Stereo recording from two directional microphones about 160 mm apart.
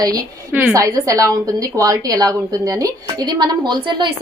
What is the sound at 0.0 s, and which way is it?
A woman's voice, 20° right (ahead or behind).